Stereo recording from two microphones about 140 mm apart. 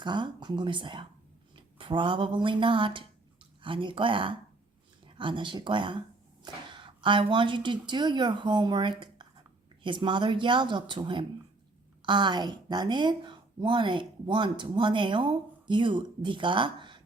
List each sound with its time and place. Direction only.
0.0 s a woman's voice: 35° right (ahead or behind)